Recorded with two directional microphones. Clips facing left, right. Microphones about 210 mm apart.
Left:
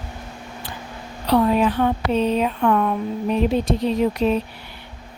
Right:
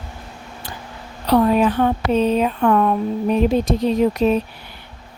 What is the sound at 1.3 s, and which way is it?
Speech, 45° right (ahead or behind).